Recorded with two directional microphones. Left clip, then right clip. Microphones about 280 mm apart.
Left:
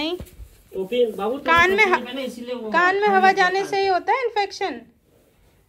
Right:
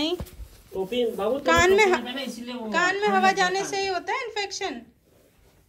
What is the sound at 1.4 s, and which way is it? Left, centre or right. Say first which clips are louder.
A woman's voice: left 3 dB; centre.